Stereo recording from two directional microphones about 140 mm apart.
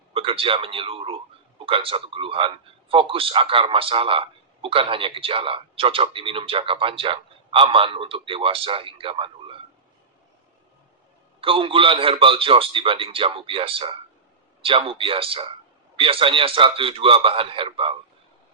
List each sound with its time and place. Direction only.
0.1 s a man's voice: 40° right (ahead or behind)
11.3 s a man's voice: 40° right (ahead or behind)